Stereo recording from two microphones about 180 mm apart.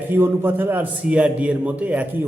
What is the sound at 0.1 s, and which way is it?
A man's voice, 10° right (ahead or behind).